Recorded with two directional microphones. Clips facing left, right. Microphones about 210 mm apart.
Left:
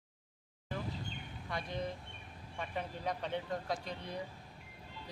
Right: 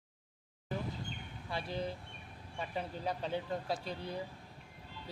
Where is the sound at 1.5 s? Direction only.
30° right (ahead or behind).